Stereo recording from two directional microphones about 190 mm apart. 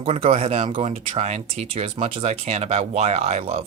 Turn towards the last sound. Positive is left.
turn(degrees=-30)  # may be behind; listen again after turning